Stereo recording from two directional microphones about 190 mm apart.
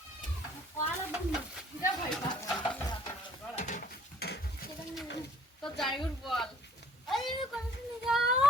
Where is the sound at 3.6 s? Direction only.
40° left (ahead or behind).